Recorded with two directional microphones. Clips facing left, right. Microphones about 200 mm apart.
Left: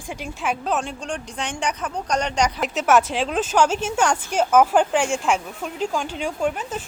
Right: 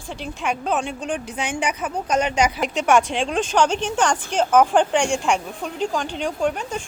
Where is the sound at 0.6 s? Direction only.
Centre (ahead or behind).